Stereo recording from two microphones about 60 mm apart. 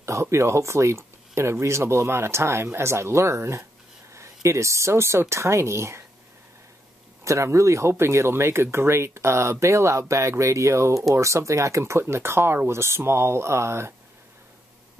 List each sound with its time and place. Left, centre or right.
0.0 s speech: right
7.2 s speech: right
8.0 s speech: right